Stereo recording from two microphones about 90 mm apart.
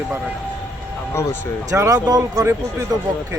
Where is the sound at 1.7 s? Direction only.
35° right (ahead or behind).